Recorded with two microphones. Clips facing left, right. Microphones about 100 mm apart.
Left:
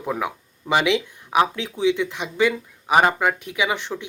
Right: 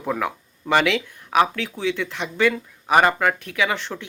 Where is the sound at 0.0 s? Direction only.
10° left (ahead or behind).